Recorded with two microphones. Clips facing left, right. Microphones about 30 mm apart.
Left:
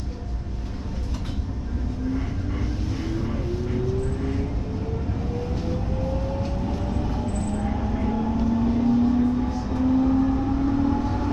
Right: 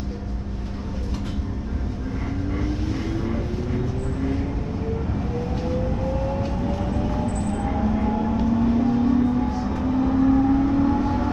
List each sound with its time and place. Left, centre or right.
7.0 s vehicle: right